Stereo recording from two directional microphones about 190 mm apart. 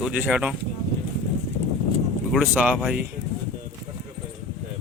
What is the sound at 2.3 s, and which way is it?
Speech, 5° right (ahead or behind).